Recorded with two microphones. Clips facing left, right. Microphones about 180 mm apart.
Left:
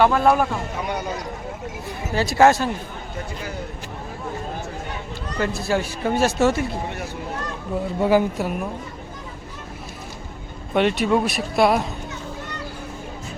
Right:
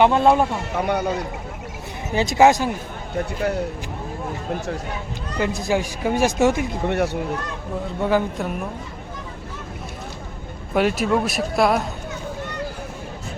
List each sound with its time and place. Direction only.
0.0 s speech: 25° right (ahead or behind)
0.8 s a man's voice: 55° right (ahead or behind)
2.1 s speech: 20° right (ahead or behind)
3.4 s speech: 65° right (ahead or behind)
5.4 s speech: 15° right (ahead or behind)
6.8 s speech: 65° right (ahead or behind)
8.0 s speech: 5° left (ahead or behind)
10.8 s speech: centre (ahead or behind)